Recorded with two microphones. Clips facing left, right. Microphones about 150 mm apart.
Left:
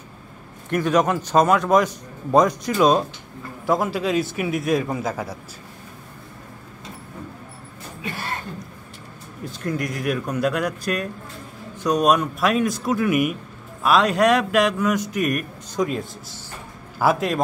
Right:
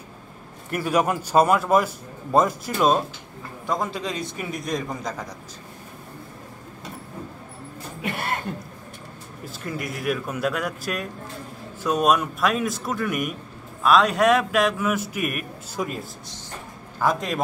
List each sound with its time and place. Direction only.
0.7 s a man's voice: 10° right (ahead or behind); by 5.4 s 10° left (ahead or behind)
8.0 s cough: 60° right (ahead or behind)
9.4 s a man's voice: 5° right (ahead or behind)